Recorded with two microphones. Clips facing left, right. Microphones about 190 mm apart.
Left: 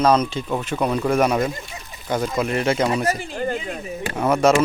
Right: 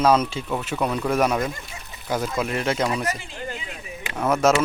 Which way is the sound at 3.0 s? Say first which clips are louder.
Left 7 dB; 45° left (ahead or behind).